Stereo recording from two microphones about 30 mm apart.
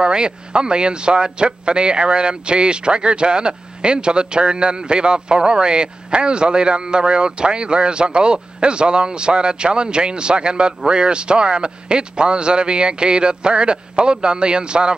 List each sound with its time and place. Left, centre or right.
0.0 s a man's voice: right